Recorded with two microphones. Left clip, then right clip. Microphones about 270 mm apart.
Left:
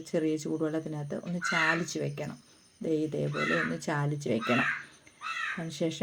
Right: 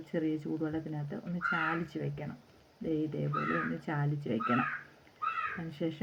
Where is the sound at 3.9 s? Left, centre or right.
Left.